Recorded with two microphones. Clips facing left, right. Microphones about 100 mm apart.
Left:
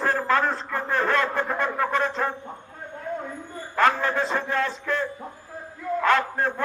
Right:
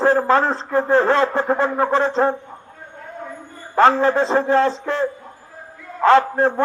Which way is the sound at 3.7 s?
30° right (ahead or behind).